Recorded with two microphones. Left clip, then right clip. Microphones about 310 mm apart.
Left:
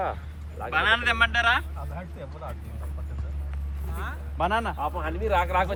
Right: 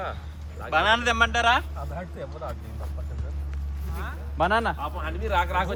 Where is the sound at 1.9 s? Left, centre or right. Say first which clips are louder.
Right 4 dB; right.